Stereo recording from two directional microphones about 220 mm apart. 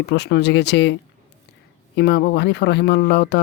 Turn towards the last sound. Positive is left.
turn(degrees=50)  # may be behind; listen again after turning